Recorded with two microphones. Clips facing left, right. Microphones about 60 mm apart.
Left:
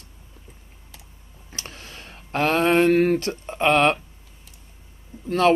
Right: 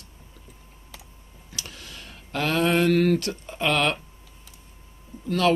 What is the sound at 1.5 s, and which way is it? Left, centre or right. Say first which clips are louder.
Speech: left 1 dB; left.